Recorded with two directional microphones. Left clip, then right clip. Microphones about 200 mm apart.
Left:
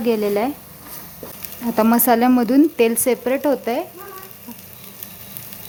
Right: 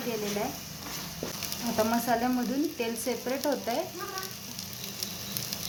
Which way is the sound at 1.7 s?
55° left (ahead or behind).